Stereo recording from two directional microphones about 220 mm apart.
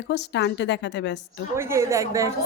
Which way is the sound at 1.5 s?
10° right (ahead or behind).